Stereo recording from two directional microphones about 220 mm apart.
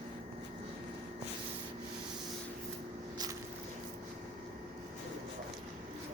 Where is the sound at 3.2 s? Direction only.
20° right (ahead or behind).